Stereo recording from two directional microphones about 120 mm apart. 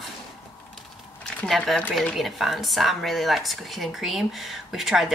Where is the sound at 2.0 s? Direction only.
Centre (ahead or behind).